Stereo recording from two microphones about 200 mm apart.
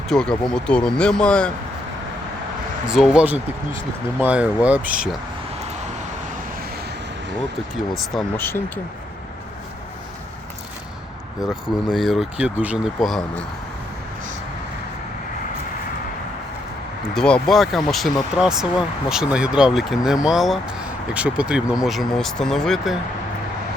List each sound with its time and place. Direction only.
0.1 s speech: 5° left (ahead or behind)
2.8 s speech: 5° right (ahead or behind)
7.9 s speech: 5° left (ahead or behind)
11.6 s speech: centre (ahead or behind)
17.2 s speech: 5° left (ahead or behind)